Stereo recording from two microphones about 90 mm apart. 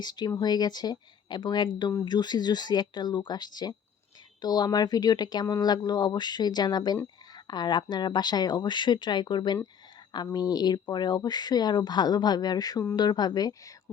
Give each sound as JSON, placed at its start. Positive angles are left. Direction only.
{"t": 0.0, "sound": "speech", "side_deg": 50}